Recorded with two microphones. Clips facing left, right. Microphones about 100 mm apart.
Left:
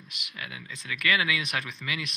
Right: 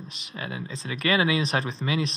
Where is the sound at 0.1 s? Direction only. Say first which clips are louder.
Right 4 dB; 30° right (ahead or behind).